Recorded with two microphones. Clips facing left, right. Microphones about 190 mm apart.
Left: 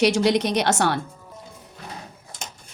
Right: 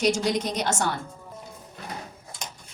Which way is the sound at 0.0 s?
70° left (ahead or behind).